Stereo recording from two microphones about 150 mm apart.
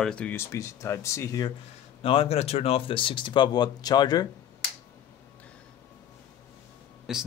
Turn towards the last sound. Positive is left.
turn(degrees=-5)  # may be behind; listen again after turning